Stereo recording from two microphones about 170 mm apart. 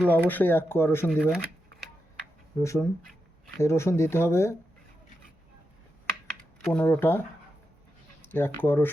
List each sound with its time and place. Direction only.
0.1 s speech: 10° left (ahead or behind)
1.1 s speech: 5° right (ahead or behind)
2.6 s speech: 15° left (ahead or behind)
6.7 s speech: 10° left (ahead or behind)
8.3 s speech: 10° left (ahead or behind)